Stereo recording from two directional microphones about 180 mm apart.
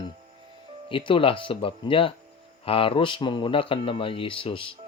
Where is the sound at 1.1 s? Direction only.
30° left (ahead or behind).